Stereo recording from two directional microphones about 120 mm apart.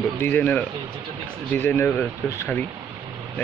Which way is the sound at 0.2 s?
15° left (ahead or behind).